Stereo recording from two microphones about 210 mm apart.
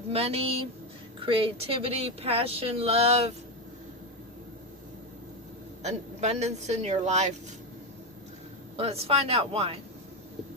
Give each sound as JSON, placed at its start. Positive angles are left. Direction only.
{"t": 0.1, "sound": "speech", "side_deg": -30}
{"t": 5.8, "sound": "speech", "side_deg": -30}
{"t": 8.7, "sound": "speech", "side_deg": -30}